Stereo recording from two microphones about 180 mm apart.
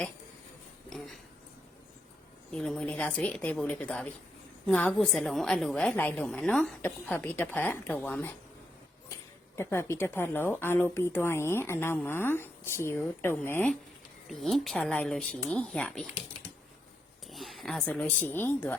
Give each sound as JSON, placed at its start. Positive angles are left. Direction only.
{"t": 0.9, "sound": "speech", "side_deg": 0}
{"t": 2.5, "sound": "a woman's voice", "side_deg": 5}
{"t": 9.6, "sound": "a woman's voice", "side_deg": 15}
{"t": 14.3, "sound": "speech", "side_deg": 0}
{"t": 17.3, "sound": "speech", "side_deg": 0}